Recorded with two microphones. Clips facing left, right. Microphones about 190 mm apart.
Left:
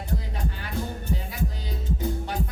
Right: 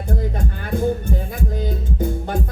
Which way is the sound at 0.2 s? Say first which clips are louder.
Right 8 dB; 50° right (ahead or behind).